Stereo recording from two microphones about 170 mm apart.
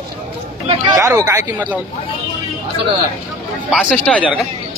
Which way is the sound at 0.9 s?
15° right (ahead or behind).